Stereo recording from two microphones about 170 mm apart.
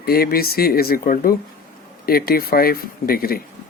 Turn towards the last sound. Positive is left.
turn(degrees=60)  # may be behind; listen again after turning